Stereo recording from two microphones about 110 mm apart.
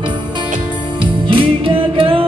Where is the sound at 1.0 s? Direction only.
50° right (ahead or behind).